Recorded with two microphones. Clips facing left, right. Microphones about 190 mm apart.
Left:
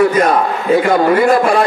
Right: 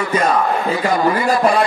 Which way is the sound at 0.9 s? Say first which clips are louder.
Left 4 dB; 60° left (ahead or behind).